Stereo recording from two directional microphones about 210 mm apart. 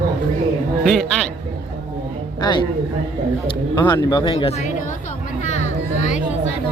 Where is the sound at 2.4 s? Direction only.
20° left (ahead or behind).